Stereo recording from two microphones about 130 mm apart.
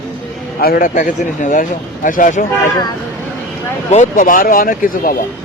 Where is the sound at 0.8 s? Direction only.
85° left.